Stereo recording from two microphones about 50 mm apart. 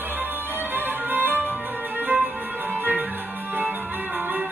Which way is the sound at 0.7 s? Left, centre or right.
Right.